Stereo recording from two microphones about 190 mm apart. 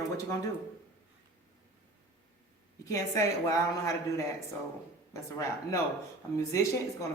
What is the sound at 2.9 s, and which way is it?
Speech, 15° left (ahead or behind).